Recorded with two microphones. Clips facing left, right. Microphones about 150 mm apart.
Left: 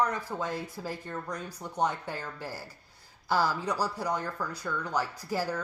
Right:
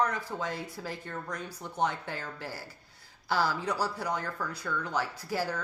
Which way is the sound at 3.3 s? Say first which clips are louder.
Left 1 dB; 40° left (ahead or behind).